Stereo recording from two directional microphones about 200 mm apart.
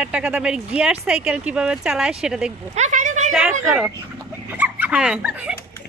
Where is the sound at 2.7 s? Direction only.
35° right (ahead or behind).